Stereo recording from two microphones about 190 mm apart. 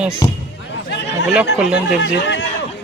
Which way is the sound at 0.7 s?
65° left (ahead or behind).